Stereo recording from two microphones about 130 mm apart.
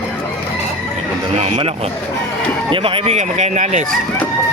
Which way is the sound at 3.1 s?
65° right (ahead or behind).